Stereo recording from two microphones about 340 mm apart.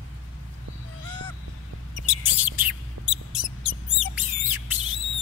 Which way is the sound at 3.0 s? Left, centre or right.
Right.